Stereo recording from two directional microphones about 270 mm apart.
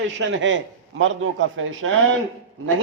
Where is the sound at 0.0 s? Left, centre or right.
Right.